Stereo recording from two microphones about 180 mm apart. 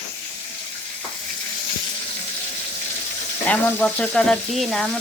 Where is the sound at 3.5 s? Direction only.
5° left (ahead or behind).